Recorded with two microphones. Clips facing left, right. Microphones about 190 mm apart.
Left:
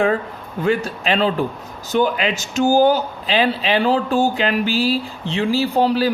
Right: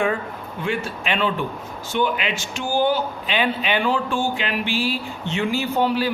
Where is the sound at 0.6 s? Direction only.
40° left (ahead or behind).